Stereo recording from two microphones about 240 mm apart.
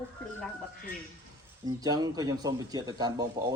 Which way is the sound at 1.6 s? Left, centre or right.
Centre.